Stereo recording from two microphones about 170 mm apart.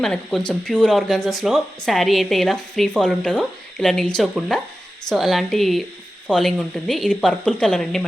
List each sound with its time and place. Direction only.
0.0 s speech: centre (ahead or behind)